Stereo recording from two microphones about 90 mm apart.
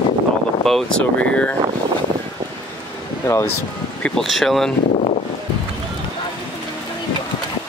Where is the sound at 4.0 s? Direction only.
Centre (ahead or behind).